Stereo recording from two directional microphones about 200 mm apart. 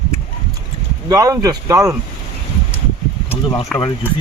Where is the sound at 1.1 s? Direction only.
15° right (ahead or behind).